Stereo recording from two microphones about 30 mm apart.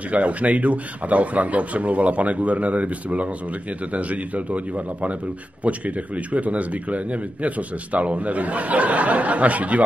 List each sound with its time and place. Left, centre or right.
0.1 s speech: right